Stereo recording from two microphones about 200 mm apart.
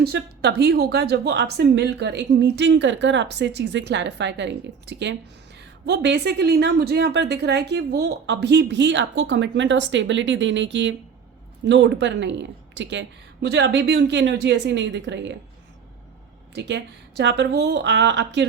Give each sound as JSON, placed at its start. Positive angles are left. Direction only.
{"t": 0.0, "sound": "a woman's voice", "side_deg": -55}
{"t": 16.6, "sound": "a woman's voice", "side_deg": -60}